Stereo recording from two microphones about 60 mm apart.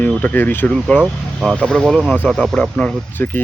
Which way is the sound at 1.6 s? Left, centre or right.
Centre.